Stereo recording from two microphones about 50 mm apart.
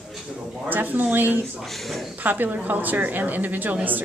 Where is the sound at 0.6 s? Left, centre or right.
Right.